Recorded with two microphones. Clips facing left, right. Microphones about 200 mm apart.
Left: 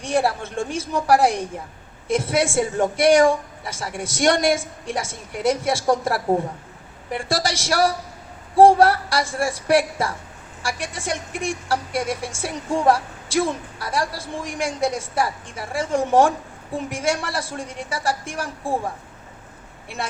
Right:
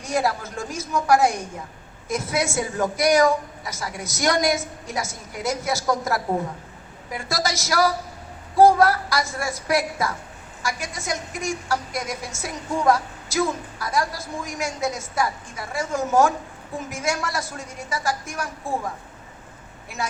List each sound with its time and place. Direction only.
0.0 s a woman's voice: 30° left (ahead or behind)